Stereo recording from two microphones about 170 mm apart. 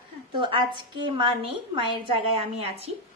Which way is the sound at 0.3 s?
30° right (ahead or behind).